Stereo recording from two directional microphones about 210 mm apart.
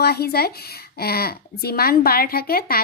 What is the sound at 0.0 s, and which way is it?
Speech, 50° left (ahead or behind).